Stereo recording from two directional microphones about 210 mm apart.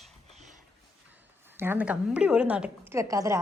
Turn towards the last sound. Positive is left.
turn(degrees=-15)  # may be behind; listen again after turning